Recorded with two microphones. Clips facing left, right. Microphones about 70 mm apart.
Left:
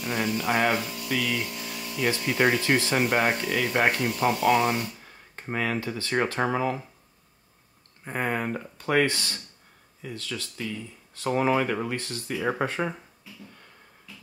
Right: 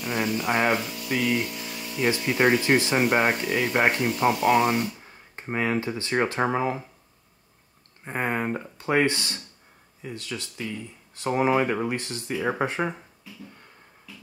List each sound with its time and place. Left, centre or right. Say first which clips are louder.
0.0 s speech: right 1 dB; centre
1.5 s speech: right 1 dB; centre
8.0 s speech: right 1 dB; centre
12.4 s speech: right 1 dB; centre